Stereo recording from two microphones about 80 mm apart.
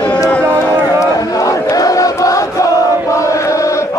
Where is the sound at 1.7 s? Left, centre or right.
Left.